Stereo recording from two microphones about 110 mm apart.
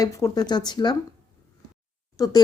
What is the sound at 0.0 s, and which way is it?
Speech, 35° left (ahead or behind).